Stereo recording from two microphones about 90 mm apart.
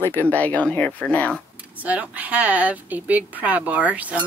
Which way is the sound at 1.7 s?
15° right (ahead or behind).